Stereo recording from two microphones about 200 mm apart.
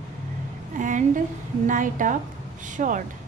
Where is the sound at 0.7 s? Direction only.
40° right (ahead or behind).